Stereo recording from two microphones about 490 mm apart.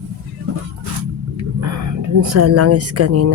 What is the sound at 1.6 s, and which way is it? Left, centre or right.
Speech, right.